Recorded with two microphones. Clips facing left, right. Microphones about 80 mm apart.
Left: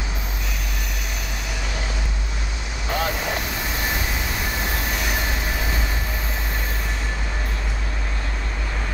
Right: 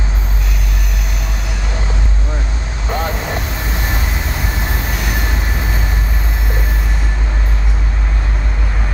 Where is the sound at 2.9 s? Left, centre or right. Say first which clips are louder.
Right 4 dB; right.